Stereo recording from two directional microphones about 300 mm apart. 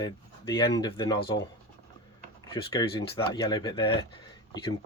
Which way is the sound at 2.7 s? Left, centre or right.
Centre.